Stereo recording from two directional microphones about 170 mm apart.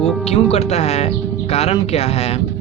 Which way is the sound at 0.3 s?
35° left (ahead or behind).